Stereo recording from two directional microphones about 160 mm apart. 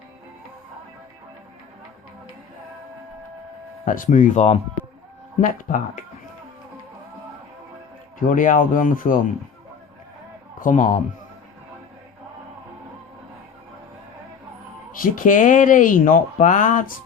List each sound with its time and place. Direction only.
3.8 s speech: 55° left (ahead or behind)
8.3 s speech: 55° left (ahead or behind)
10.6 s a man's voice: 55° left (ahead or behind)
14.9 s speech: 60° left (ahead or behind)